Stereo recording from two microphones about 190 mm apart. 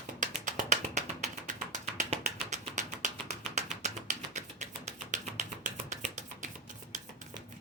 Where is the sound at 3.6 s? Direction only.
40° right (ahead or behind).